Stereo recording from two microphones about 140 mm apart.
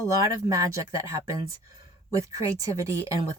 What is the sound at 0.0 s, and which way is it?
A woman's voice, 25° right (ahead or behind).